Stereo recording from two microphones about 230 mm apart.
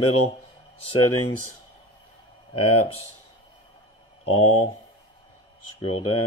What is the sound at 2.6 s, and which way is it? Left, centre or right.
Speech, left.